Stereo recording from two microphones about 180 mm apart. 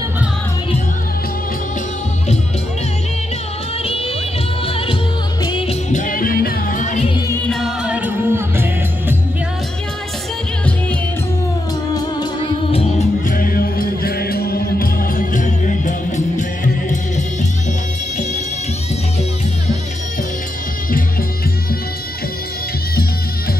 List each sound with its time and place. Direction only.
4.6 s music: 30° left (ahead or behind)
7.4 s music: centre (ahead or behind)
11.9 s music: 20° left (ahead or behind)
12.7 s music: 40° left (ahead or behind)
13.4 s music: 55° left (ahead or behind)